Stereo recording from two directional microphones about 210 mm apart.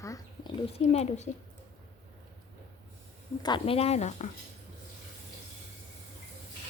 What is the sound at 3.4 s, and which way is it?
Speech, 25° left (ahead or behind).